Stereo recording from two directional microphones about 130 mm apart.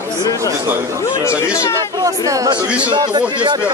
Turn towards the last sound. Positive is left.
turn(degrees=-35)  # may be behind; listen again after turning